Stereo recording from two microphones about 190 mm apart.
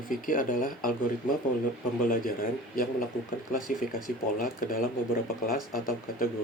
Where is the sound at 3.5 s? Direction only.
45° left (ahead or behind).